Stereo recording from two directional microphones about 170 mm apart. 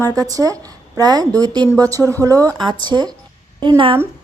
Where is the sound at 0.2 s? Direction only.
20° right (ahead or behind).